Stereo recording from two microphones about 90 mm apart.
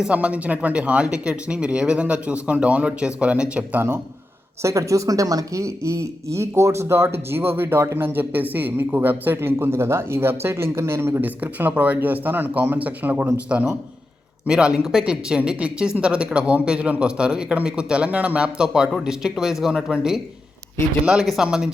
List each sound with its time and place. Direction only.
0.0 s speech: 15° right (ahead or behind)
4.6 s speech: 35° right (ahead or behind); by 13.7 s 20° right (ahead or behind)
14.4 s speech: 10° right (ahead or behind)